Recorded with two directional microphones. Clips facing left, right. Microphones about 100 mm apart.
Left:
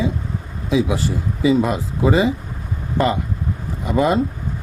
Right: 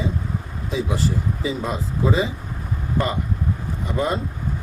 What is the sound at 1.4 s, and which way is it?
Speech, 80° left.